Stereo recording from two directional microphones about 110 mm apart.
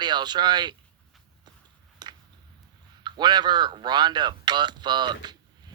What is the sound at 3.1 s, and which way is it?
A man's voice, 40° right (ahead or behind).